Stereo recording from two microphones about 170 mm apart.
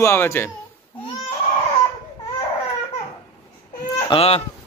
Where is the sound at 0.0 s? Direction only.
15° left (ahead or behind).